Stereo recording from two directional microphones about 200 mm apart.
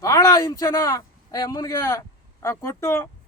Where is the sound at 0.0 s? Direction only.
15° left (ahead or behind).